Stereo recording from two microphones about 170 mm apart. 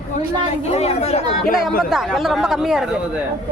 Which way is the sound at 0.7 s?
40° left (ahead or behind).